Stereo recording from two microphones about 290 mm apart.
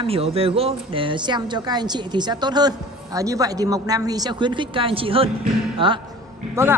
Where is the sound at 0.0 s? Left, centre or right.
Centre.